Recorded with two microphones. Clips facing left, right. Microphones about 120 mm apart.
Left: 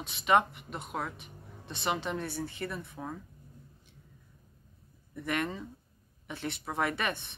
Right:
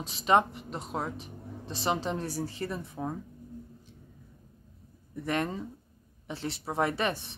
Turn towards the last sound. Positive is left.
turn(degrees=-30)  # may be behind; listen again after turning